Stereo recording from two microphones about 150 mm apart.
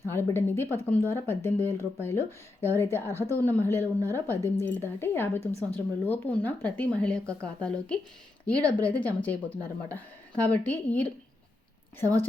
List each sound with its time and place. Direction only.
0.0 s speech: 20° left (ahead or behind)